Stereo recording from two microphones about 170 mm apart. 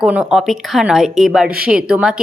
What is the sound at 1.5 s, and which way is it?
Speech, 60° right (ahead or behind).